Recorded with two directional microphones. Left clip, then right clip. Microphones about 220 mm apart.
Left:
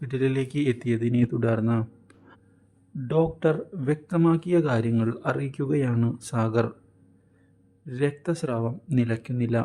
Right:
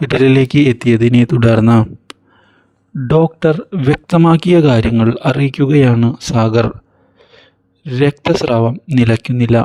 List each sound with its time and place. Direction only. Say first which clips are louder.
0.0 s speech: right 16 dB; 45° right (ahead or behind)
7.9 s speech: right 14 dB; 40° right (ahead or behind)